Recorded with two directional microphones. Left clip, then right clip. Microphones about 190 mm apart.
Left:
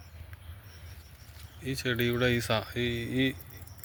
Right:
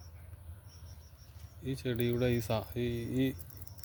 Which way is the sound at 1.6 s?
5° right (ahead or behind).